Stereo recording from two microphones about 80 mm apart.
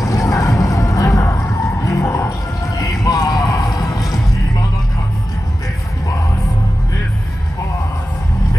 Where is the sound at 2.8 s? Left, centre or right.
Left.